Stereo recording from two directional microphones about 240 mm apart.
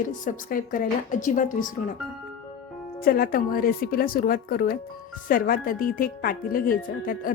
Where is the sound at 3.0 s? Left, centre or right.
Left.